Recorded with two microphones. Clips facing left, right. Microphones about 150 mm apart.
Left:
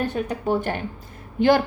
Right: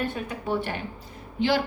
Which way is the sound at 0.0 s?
45° left (ahead or behind).